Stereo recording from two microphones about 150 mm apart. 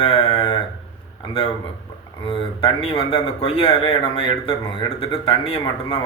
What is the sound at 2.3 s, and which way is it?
A man's voice, 40° left (ahead or behind).